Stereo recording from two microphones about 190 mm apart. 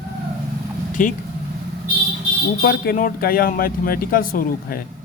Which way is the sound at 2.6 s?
50° left (ahead or behind).